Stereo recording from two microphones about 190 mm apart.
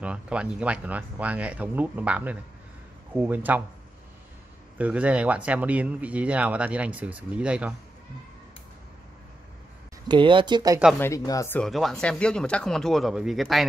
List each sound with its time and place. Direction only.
0.0 s speech: 5° right (ahead or behind)
4.7 s speech: 5° right (ahead or behind)
10.0 s speech: 25° right (ahead or behind)
11.0 s speech: 15° left (ahead or behind); by 13.7 s centre (ahead or behind)